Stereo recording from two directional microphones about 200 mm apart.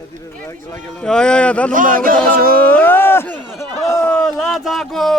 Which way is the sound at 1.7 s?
45° right (ahead or behind).